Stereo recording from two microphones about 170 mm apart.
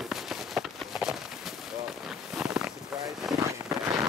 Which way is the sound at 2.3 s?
5° right (ahead or behind).